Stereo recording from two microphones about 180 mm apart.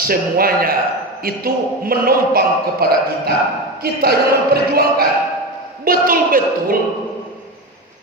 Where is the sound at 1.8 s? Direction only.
55° right (ahead or behind).